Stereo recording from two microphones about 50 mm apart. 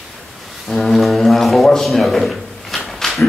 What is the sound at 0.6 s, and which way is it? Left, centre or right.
Music, centre.